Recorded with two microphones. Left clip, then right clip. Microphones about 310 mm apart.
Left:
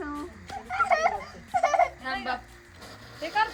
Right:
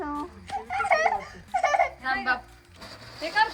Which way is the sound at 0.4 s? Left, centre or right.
Left.